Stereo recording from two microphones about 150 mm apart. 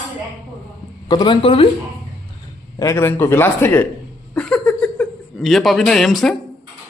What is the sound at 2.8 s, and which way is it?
Speech, 15° left (ahead or behind).